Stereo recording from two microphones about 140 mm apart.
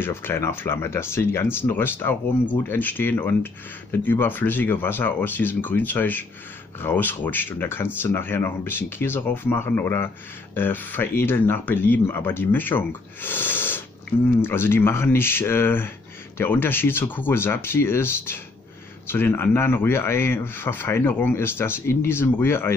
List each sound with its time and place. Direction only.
0.0 s speech: 15° left (ahead or behind)